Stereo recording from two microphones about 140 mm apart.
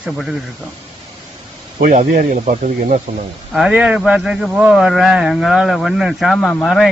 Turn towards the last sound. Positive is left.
turn(degrees=5)  # may be behind; listen again after turning